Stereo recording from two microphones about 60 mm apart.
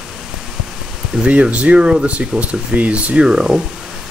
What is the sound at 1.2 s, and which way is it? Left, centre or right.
Speech, right.